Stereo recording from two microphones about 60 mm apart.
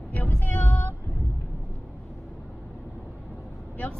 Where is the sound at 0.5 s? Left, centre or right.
Left.